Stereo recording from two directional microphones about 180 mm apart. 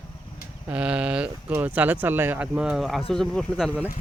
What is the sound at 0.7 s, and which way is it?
Speech, 5° right (ahead or behind).